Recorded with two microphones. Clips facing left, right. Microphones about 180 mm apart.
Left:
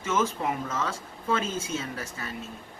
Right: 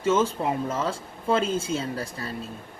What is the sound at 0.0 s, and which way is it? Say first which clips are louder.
A woman's voice: right 4 dB; 30° right (ahead or behind).